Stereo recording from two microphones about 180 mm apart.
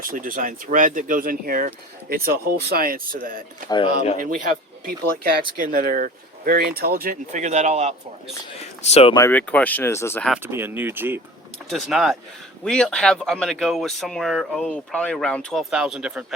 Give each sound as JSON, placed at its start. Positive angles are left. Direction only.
{"t": 0.0, "sound": "speech", "side_deg": -50}
{"t": 3.9, "sound": "speech", "side_deg": 35}
{"t": 4.2, "sound": "speech", "side_deg": -50}
{"t": 8.9, "sound": "speech", "side_deg": 35}
{"t": 9.1, "sound": "speech", "side_deg": 15}
{"t": 10.4, "sound": "speech", "side_deg": -10}
{"t": 11.7, "sound": "speech", "side_deg": 0}